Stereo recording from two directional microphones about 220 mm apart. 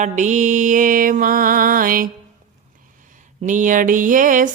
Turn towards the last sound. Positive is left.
turn(degrees=-35)  # may be behind; listen again after turning